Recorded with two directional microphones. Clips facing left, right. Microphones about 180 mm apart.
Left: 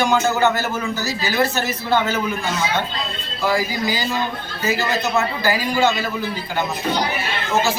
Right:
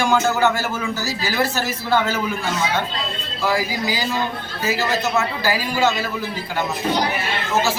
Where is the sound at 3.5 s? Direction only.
5° right (ahead or behind).